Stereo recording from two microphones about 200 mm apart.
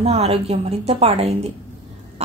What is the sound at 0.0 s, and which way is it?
Speech, 30° right (ahead or behind).